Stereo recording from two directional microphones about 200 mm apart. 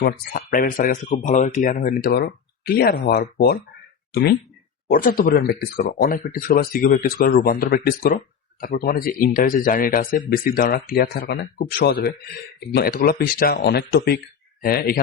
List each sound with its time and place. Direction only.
0.0 s speech: 45° left (ahead or behind)
4.9 s speech: 45° left (ahead or behind)